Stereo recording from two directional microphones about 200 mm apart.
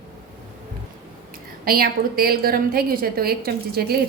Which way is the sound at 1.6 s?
50° right (ahead or behind).